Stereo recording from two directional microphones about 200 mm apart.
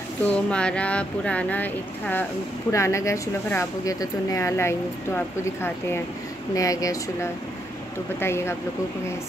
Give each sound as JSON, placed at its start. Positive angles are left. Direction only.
{"t": 0.2, "sound": "speech", "side_deg": 5}